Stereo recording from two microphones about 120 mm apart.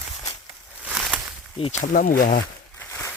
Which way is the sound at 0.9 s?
10° right (ahead or behind).